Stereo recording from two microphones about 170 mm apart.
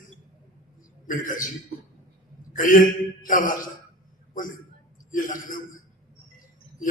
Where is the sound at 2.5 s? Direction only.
50° left (ahead or behind).